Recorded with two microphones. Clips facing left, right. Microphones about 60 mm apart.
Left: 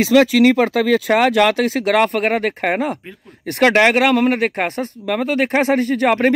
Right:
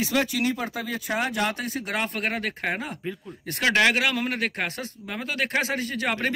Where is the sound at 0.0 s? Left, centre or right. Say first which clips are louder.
Left 13 dB; left.